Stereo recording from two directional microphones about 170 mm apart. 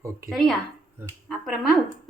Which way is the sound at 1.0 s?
5° right (ahead or behind).